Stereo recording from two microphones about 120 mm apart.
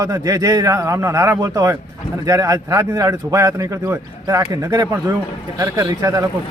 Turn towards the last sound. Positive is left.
turn(degrees=-25)  # may be behind; listen again after turning